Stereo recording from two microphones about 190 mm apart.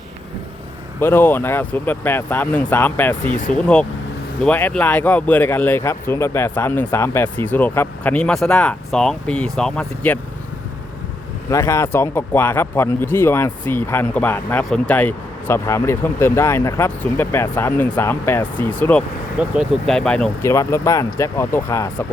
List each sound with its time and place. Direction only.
0.9 s speech: 10° left (ahead or behind)
11.4 s speech: 15° left (ahead or behind)
19.4 s speech: centre (ahead or behind)
20.4 s speech: 15° left (ahead or behind)